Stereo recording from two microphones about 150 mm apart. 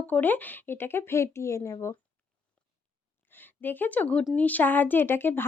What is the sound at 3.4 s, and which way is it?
Speech, 15° left (ahead or behind).